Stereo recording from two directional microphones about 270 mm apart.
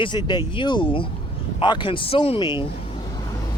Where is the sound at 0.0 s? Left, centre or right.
Centre.